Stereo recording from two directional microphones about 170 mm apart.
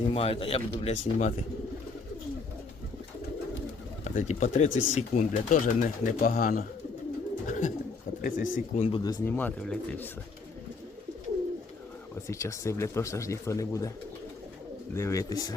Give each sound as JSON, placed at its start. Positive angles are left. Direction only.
{"t": 0.1, "sound": "speech", "side_deg": 35}
{"t": 4.0, "sound": "speech", "side_deg": 45}
{"t": 7.4, "sound": "bird", "side_deg": 45}
{"t": 8.2, "sound": "speech", "side_deg": 50}
{"t": 9.0, "sound": "speech", "side_deg": 10}
{"t": 12.3, "sound": "speech", "side_deg": 15}
{"t": 14.9, "sound": "speech", "side_deg": 15}